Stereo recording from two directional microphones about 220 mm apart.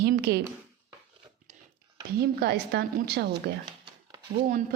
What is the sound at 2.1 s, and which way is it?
A woman's voice, 45° right (ahead or behind).